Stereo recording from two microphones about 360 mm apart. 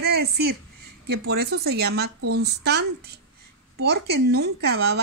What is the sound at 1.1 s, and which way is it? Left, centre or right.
Speech, right.